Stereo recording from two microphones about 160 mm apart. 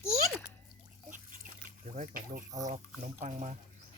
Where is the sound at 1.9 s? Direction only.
60° right (ahead or behind).